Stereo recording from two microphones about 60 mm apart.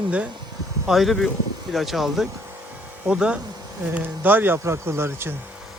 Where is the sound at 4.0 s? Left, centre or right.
Right.